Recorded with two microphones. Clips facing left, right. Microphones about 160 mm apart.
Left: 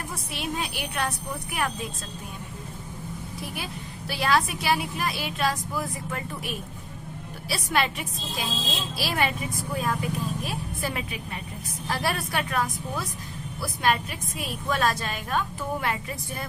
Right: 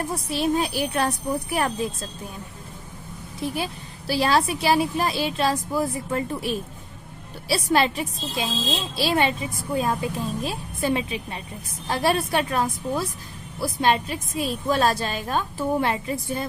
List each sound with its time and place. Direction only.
0.3 s a woman's voice: 35° right (ahead or behind)
3.4 s a woman's voice: 30° right (ahead or behind)